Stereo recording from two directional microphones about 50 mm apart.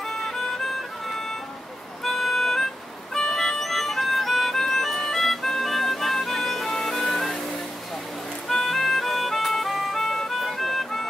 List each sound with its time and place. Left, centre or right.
0.1 s music: centre
8.4 s music: centre